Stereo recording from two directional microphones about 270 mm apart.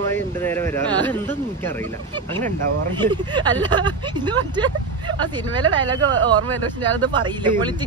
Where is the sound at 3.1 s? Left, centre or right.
Centre.